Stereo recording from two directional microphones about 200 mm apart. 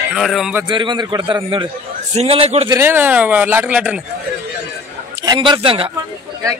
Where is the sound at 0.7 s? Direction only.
25° right (ahead or behind).